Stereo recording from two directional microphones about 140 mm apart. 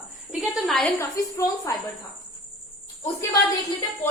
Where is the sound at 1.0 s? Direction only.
20° left (ahead or behind).